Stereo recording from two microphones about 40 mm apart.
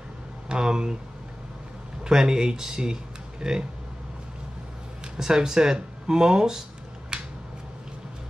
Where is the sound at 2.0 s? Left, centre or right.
Centre.